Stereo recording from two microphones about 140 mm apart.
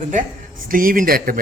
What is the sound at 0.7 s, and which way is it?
Speech, 90° right.